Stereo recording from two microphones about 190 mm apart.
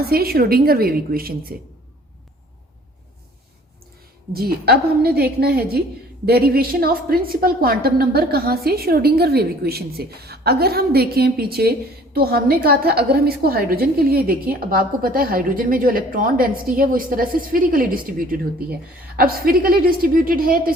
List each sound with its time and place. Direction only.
0.0 s a woman's voice: 55° right (ahead or behind)
4.4 s a woman's voice: 55° right (ahead or behind)